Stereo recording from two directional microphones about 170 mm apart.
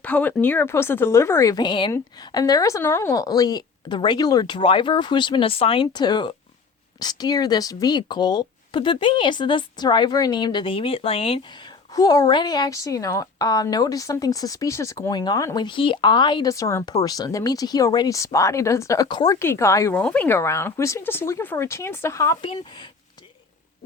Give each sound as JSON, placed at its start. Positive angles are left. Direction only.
{"t": 0.0, "sound": "speech", "side_deg": 10}
{"t": 22.4, "sound": "speech", "side_deg": 30}